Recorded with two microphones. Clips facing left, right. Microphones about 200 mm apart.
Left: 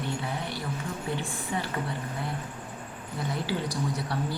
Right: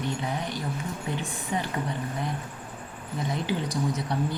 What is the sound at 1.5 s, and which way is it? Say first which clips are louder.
Speech: right 2 dB; 20° right (ahead or behind).